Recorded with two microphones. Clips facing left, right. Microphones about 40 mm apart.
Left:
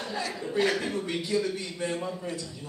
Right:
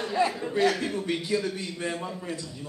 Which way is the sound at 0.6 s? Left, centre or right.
Centre.